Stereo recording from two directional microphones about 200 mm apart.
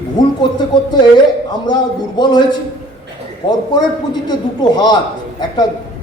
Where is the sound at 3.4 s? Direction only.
20° left (ahead or behind).